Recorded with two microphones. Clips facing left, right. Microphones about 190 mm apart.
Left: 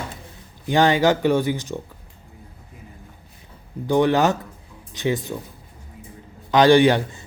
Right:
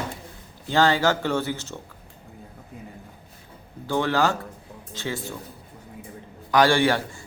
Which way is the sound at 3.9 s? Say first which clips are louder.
Left 5 dB; 15° left (ahead or behind).